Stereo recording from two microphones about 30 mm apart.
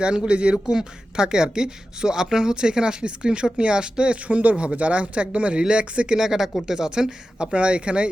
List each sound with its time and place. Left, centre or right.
0.3 s speech: right
5.6 s speech: right
6.1 s speech: centre
7.4 s speech: right